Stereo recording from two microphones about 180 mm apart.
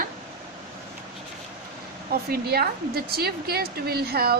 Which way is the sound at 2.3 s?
60° right (ahead or behind).